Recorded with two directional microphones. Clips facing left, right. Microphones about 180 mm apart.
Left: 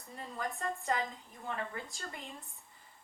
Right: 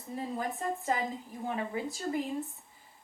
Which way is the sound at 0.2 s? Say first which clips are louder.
Right 4 dB; 5° right (ahead or behind).